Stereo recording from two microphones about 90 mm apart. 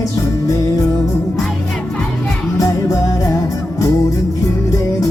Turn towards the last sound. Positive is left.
turn(degrees=35)  # may be behind; listen again after turning